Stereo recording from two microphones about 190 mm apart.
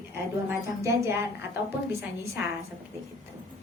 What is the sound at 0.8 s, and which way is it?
Speech, 15° right (ahead or behind).